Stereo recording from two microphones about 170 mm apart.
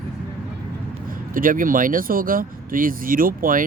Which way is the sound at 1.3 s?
55° right (ahead or behind).